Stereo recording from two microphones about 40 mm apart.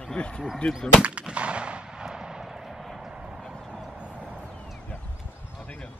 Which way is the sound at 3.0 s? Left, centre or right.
Centre.